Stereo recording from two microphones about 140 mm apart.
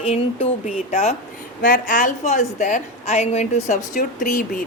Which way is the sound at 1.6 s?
70° left (ahead or behind).